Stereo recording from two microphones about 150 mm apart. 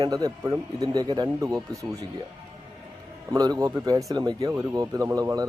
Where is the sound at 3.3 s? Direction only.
25° right (ahead or behind).